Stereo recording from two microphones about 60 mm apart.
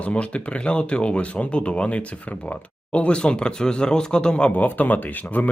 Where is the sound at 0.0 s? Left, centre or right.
Centre.